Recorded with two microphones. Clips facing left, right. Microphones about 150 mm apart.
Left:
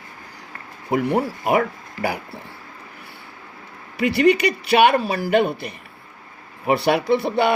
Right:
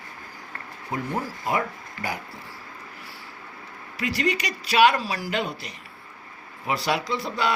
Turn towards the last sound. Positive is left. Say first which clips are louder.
# left 8 dB
turn(degrees=60)  # may be behind; listen again after turning